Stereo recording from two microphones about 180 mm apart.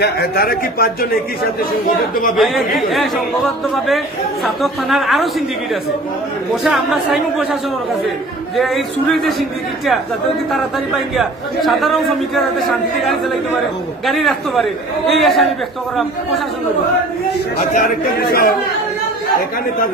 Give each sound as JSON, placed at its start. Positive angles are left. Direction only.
{"t": 0.0, "sound": "speech", "side_deg": 60}
{"t": 2.3, "sound": "a man's voice", "side_deg": 0}
{"t": 6.5, "sound": "a man's voice", "side_deg": 0}
{"t": 8.5, "sound": "a man's voice", "side_deg": 0}
{"t": 17.7, "sound": "speech", "side_deg": 55}